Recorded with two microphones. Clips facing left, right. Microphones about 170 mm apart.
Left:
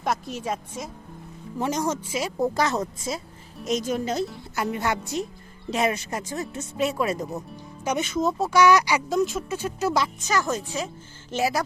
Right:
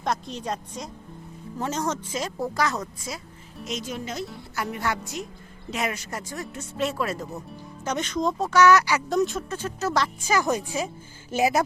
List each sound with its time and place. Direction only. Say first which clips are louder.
0.0 s a woman's voice: left 1 dB; 5° left (ahead or behind)
2.4 s a woman's voice: left 4 dB; 25° left (ahead or behind)
3.7 s speech: left 7 dB; 45° left (ahead or behind)
4.5 s a woman's voice: left 2 dB; 20° left (ahead or behind)
6.7 s speech: left 2 dB; 15° left (ahead or behind)
9.0 s speech: even; centre (ahead or behind)
10.2 s speech: right 2 dB; 10° right (ahead or behind)